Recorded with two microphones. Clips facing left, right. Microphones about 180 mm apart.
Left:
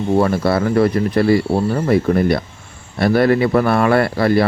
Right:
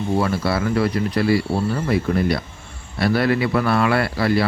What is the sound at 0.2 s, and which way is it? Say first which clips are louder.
Speech: left 6 dB; 50° left (ahead or behind).